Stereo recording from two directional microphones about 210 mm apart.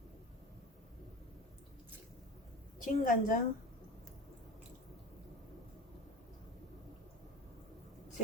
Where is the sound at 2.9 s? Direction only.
40° left (ahead or behind).